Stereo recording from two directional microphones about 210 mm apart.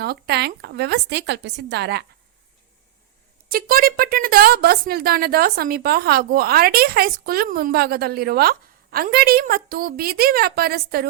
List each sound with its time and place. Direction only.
0.0 s speech: 50° right (ahead or behind)
3.5 s speech: 45° right (ahead or behind)